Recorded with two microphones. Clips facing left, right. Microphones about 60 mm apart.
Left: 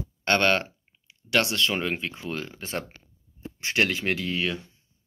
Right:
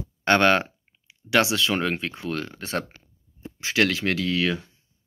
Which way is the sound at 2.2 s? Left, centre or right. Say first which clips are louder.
Right 3 dB; right.